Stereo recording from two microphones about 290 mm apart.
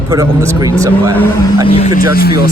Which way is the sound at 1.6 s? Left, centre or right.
Centre.